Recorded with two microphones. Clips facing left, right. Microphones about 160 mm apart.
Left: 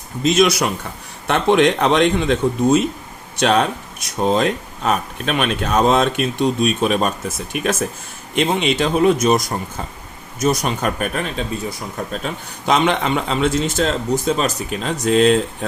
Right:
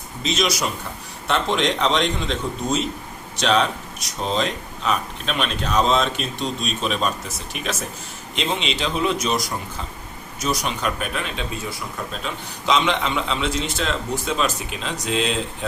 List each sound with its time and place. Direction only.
0.2 s speech: 50° left (ahead or behind)